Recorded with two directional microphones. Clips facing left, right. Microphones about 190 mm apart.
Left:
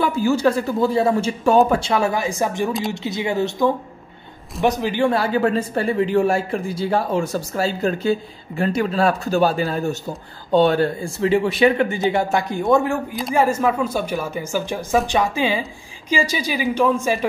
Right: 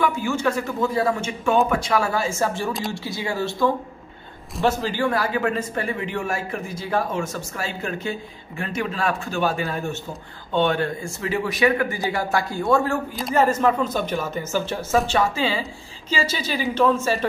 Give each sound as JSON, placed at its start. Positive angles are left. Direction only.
{"t": 0.0, "sound": "a man's voice", "side_deg": 35}